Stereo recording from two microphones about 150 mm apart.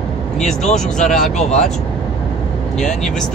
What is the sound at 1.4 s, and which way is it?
Speech, 50° left (ahead or behind).